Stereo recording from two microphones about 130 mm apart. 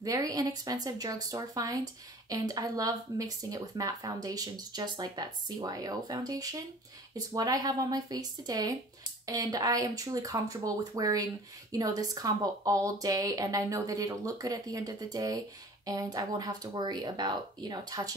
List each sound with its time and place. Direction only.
0.0 s speech: 25° right (ahead or behind)